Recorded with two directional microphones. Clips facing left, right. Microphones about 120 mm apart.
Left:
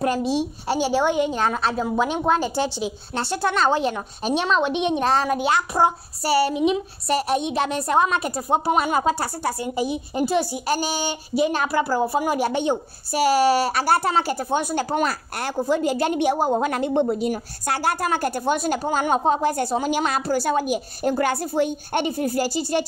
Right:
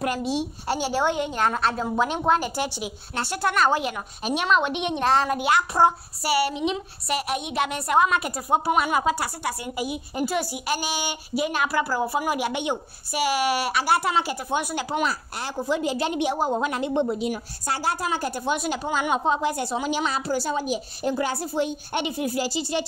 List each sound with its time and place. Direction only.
0.0 s a woman's voice: 30° left (ahead or behind)
0.9 s a woman's voice: 15° left (ahead or behind)
6.2 s a woman's voice: 30° left (ahead or behind)
10.7 s speech: 35° left (ahead or behind)
14.8 s a woman's voice: 45° left (ahead or behind)
15.5 s a woman's voice: 40° left (ahead or behind)